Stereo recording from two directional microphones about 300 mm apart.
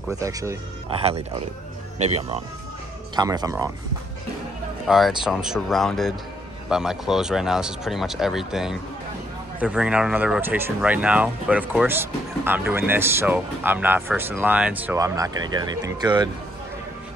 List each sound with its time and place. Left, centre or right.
0.1 s speech: centre
4.8 s speech: centre